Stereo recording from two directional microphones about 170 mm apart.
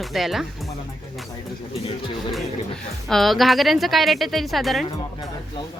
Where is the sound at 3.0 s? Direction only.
Centre (ahead or behind).